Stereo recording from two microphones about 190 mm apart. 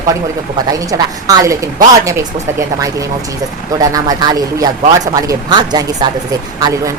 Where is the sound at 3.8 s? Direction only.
20° right (ahead or behind).